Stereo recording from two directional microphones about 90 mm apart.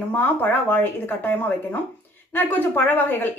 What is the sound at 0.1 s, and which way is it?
A woman's voice, 20° left (ahead or behind).